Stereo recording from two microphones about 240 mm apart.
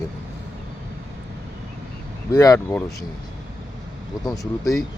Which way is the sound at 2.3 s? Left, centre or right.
Centre.